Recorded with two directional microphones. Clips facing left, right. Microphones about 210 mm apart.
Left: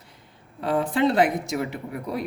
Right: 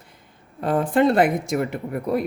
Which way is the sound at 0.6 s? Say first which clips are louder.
Right 3 dB; 50° right (ahead or behind).